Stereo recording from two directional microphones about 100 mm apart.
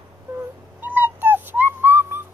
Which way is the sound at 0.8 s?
20° right (ahead or behind).